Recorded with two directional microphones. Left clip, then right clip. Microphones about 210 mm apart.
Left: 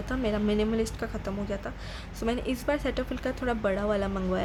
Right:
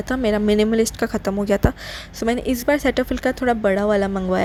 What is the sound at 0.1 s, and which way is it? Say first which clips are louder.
A woman's voice: right 10 dB; 30° right (ahead or behind).